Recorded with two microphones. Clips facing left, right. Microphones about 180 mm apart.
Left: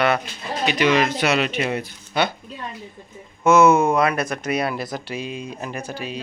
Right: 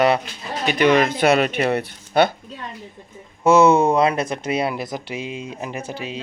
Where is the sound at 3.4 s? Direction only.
35° right (ahead or behind).